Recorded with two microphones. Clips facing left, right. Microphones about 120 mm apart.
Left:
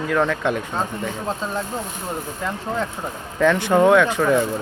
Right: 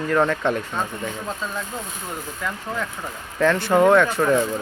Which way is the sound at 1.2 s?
30° left (ahead or behind).